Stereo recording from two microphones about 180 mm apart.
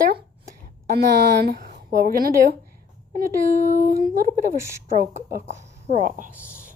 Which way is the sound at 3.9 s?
55° right (ahead or behind).